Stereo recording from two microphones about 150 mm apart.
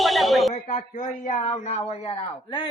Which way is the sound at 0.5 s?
55° left (ahead or behind).